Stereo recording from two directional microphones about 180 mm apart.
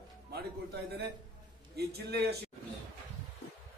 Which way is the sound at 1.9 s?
65° right (ahead or behind).